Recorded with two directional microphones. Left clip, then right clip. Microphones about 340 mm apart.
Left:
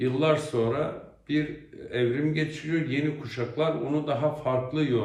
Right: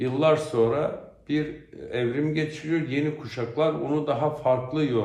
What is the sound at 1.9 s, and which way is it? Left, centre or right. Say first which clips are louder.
A man's voice: even; centre.